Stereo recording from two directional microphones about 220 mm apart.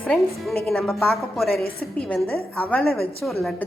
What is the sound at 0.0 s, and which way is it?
A woman's voice, centre (ahead or behind).